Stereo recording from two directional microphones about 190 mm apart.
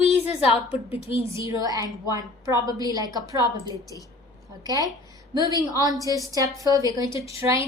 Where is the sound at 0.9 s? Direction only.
30° left (ahead or behind).